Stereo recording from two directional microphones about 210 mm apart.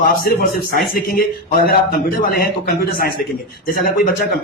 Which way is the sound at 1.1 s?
45° left (ahead or behind).